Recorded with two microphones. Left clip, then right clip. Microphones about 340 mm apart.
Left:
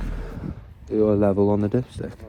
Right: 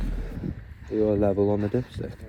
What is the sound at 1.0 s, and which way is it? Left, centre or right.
Speech, left.